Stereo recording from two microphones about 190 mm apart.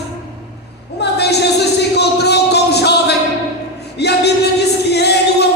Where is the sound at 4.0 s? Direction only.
60° left (ahead or behind).